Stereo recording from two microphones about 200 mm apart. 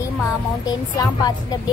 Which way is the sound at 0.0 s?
15° left (ahead or behind).